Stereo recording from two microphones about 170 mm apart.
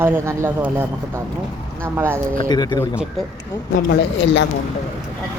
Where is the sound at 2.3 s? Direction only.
25° left (ahead or behind).